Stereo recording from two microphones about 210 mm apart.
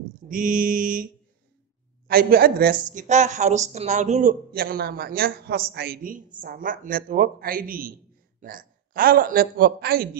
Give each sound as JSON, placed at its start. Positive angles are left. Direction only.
{"t": 0.3, "sound": "mantra", "side_deg": -40}
{"t": 2.0, "sound": "a woman's voice", "side_deg": -45}